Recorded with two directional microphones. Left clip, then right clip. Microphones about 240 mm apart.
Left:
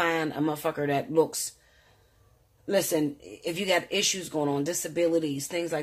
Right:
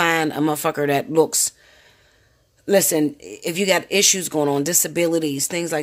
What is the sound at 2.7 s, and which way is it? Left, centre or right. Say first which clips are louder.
Speech: right 8 dB; right.